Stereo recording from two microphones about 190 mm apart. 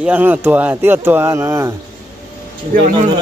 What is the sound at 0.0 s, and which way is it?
Speech, 10° right (ahead or behind).